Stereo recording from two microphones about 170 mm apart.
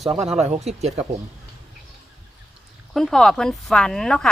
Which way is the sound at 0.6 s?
40° right (ahead or behind).